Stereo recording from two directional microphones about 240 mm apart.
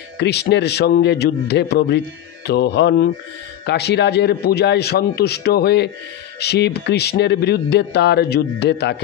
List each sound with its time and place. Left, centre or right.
0.2 s speech: left